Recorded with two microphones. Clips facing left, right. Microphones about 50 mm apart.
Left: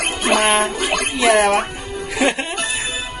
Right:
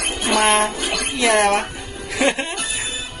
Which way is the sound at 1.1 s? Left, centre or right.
Centre.